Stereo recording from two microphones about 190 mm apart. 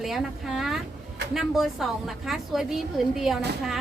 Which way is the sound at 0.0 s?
Centre (ahead or behind).